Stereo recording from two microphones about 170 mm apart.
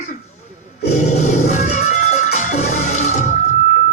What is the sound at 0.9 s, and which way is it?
Music, 45° left (ahead or behind).